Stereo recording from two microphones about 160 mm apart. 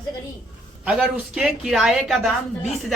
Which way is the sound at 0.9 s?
5° right (ahead or behind).